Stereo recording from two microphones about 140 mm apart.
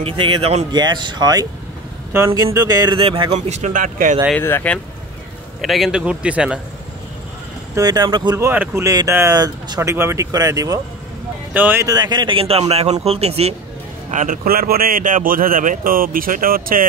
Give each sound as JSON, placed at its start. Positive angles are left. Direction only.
{"t": 0.0, "sound": "speech", "side_deg": -40}
{"t": 0.7, "sound": "speech", "side_deg": -30}
{"t": 3.0, "sound": "speech", "side_deg": -40}
{"t": 3.3, "sound": "speech", "side_deg": -55}
{"t": 4.4, "sound": "speech", "side_deg": 15}
{"t": 5.6, "sound": "a man's voice", "side_deg": 0}
{"t": 7.7, "sound": "speech", "side_deg": -25}
{"t": 8.5, "sound": "speech", "side_deg": -15}
{"t": 11.5, "sound": "a man's voice", "side_deg": -15}
{"t": 11.9, "sound": "a man's voice", "side_deg": -30}
{"t": 14.1, "sound": "speech", "side_deg": -75}